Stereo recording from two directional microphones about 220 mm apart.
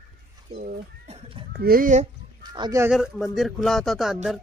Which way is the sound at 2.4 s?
20° right (ahead or behind).